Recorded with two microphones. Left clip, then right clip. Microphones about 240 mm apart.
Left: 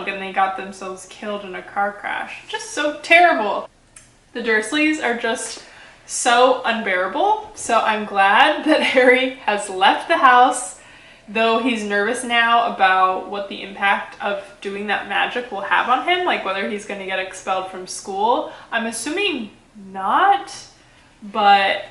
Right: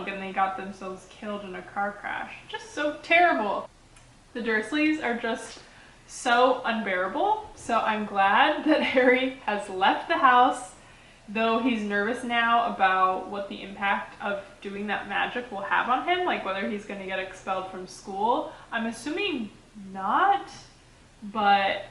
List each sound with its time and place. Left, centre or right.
0.0 s speech: centre
18.2 s speech: right
18.8 s speech: centre